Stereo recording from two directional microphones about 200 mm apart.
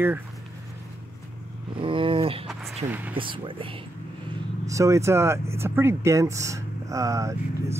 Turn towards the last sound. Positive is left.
turn(degrees=-15)  # may be behind; listen again after turning